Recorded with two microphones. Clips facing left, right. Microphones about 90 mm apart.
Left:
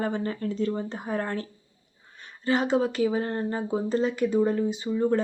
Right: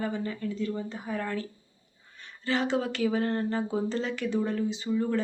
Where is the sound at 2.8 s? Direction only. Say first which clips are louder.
Left 3 dB; 25° left (ahead or behind).